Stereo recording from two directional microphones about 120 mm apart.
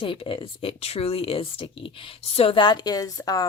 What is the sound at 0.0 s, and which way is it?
Speech, 45° left (ahead or behind).